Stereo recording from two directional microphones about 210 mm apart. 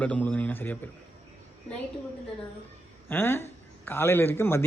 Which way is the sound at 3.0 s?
10° left (ahead or behind).